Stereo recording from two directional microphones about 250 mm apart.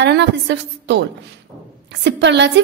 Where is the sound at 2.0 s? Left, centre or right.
Right.